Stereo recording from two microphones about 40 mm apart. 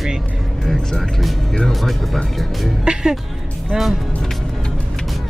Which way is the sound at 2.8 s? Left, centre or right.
Centre.